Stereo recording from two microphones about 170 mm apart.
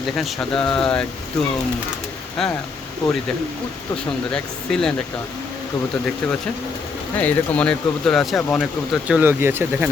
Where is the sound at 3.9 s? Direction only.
5° left (ahead or behind).